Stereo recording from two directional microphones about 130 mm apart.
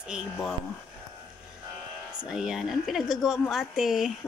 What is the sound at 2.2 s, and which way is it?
A woman's voice, 5° right (ahead or behind).